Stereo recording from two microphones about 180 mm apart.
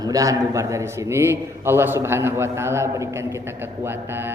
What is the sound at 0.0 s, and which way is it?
A man's voice, 20° right (ahead or behind).